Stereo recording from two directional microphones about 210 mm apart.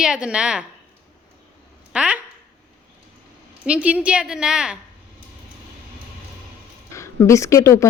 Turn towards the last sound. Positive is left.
turn(degrees=15)  # may be behind; listen again after turning